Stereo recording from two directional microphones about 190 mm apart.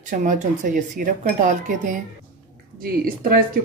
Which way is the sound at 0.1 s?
45° right (ahead or behind).